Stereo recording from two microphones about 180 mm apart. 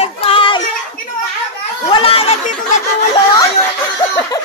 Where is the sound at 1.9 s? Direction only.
30° left (ahead or behind).